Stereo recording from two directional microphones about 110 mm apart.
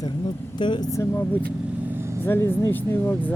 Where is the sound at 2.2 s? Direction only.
20° left (ahead or behind).